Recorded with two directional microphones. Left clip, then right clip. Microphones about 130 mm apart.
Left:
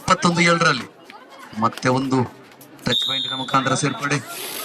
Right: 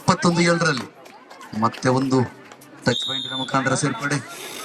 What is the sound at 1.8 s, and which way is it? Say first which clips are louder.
Speech: right 1 dB; 25° left (ahead or behind).